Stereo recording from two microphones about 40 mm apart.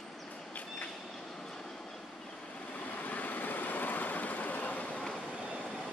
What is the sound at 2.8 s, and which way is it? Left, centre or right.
Vehicle, left.